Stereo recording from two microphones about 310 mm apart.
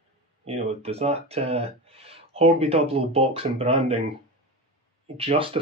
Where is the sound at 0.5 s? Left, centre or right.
Centre.